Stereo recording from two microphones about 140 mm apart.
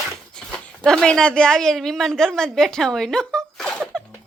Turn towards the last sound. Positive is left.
turn(degrees=0)  # may be behind; listen again after turning